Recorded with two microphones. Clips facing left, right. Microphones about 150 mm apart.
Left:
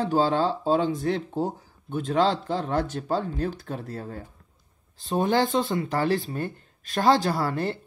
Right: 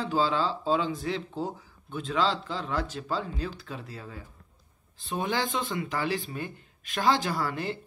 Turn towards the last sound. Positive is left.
turn(degrees=50)  # may be behind; listen again after turning